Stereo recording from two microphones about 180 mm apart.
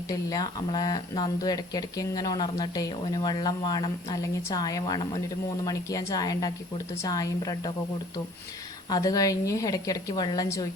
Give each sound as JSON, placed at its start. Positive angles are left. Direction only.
{"t": 0.1, "sound": "speech", "side_deg": 20}
{"t": 8.9, "sound": "speech", "side_deg": 20}